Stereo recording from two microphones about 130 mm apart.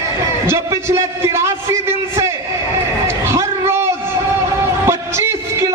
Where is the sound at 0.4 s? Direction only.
20° right (ahead or behind).